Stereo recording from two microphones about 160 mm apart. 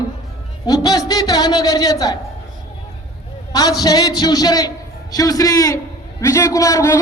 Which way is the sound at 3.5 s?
25° left (ahead or behind).